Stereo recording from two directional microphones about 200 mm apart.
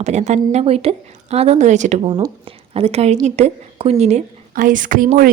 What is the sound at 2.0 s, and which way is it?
A woman's voice, 20° right (ahead or behind).